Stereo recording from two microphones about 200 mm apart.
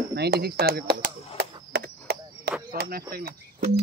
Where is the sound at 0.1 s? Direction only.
55° right (ahead or behind).